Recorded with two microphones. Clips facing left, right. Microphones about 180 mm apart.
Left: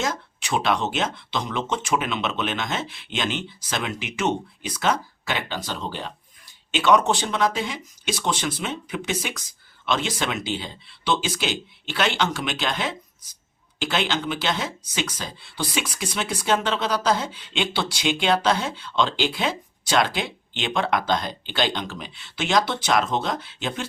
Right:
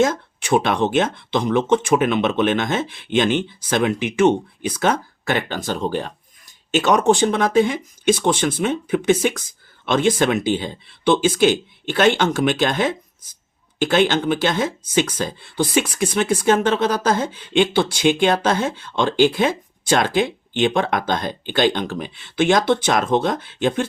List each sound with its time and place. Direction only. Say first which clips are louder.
0.0 s speech: right 9 dB; 50° right (ahead or behind)